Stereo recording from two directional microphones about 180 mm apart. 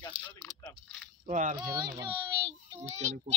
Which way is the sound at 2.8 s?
35° right (ahead or behind).